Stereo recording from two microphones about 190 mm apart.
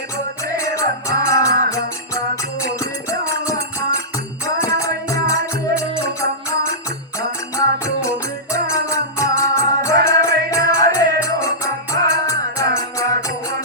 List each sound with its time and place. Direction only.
0.4 s music: 15° left (ahead or behind)
7.2 s music: 15° left (ahead or behind)